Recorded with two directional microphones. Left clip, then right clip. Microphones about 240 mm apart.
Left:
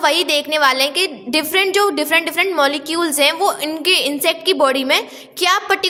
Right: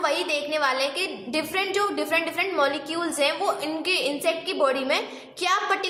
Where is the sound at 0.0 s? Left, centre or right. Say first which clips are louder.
Left 9 dB; left.